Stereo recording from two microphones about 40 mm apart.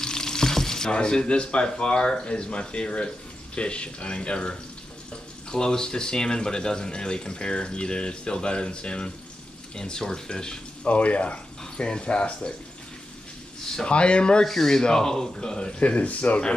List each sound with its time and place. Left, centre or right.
0.0 s frying: centre
0.9 s speech: left
10.9 s speech: left
11.6 s speech: left
13.8 s speech: left
14.4 s speech: centre
15.8 s speech: left